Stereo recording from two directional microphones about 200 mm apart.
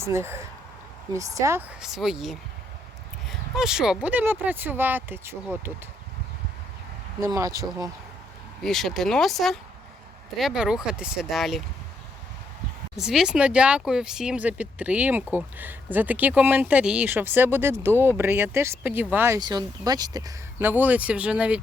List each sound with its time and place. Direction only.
0.0 s speech: 15° right (ahead or behind)
7.2 s speech: 15° right (ahead or behind)
8.6 s speech: centre (ahead or behind)
13.0 s speech: 5° right (ahead or behind)